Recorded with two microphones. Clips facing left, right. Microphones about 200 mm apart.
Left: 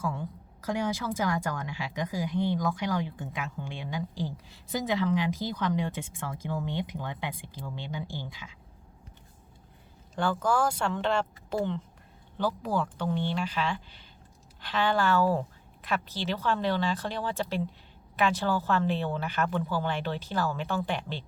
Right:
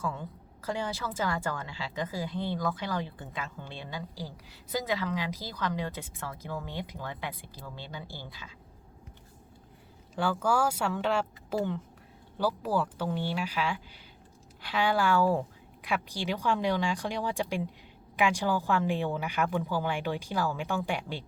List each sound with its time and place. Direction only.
0.0 s a woman's voice: 10° left (ahead or behind)
10.2 s a woman's voice: 10° right (ahead or behind)